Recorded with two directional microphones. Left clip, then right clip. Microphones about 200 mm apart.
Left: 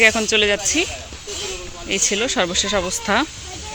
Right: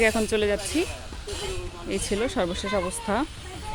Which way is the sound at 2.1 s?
10° right (ahead or behind).